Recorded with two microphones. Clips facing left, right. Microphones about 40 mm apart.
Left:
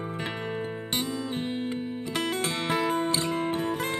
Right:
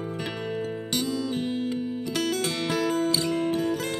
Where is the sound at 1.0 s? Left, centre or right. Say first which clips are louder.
Right 4 dB; left.